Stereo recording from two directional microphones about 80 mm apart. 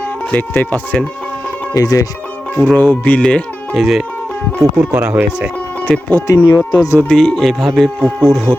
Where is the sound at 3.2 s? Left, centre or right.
Centre.